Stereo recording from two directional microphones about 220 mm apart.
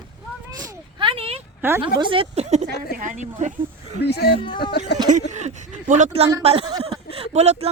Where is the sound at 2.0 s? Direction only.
25° right (ahead or behind).